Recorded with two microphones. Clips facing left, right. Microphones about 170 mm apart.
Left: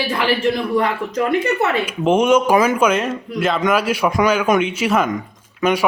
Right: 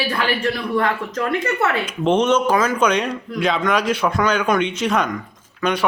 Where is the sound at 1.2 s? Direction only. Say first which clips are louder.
Left 5 dB; 20° left (ahead or behind).